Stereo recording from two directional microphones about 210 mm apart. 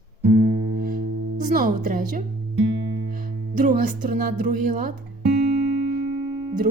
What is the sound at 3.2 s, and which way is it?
Speech, 40° right (ahead or behind).